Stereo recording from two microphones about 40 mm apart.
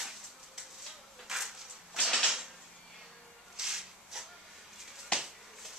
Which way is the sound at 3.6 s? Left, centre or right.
Centre.